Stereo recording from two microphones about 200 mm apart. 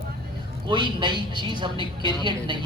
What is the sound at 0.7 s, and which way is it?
A woman's voice, 25° right (ahead or behind).